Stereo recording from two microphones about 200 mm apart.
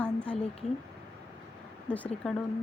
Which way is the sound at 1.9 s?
5° left (ahead or behind).